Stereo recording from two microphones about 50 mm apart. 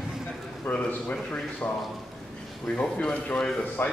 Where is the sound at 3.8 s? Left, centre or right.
Left.